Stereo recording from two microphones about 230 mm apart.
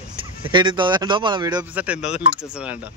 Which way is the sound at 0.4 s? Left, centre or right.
Right.